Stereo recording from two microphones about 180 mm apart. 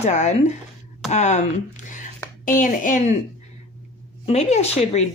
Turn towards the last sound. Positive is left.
turn(degrees=35)  # may be behind; listen again after turning